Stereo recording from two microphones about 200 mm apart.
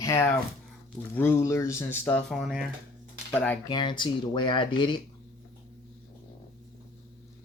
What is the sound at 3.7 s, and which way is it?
Speech, 20° left (ahead or behind).